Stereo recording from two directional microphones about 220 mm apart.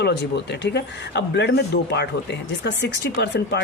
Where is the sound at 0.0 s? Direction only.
50° left (ahead or behind).